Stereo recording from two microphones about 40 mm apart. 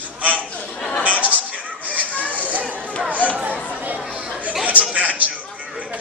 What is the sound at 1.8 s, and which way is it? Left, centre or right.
Children playing, left.